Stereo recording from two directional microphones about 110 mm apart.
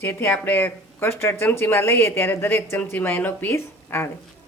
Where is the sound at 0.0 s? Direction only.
20° left (ahead or behind).